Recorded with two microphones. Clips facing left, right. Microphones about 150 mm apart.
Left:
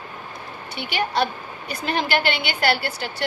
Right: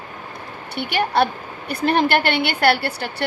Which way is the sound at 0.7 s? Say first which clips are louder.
Right 4 dB; 60° right (ahead or behind).